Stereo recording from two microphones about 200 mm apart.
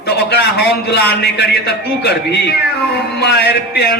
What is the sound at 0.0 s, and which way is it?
A man's voice, 55° left (ahead or behind).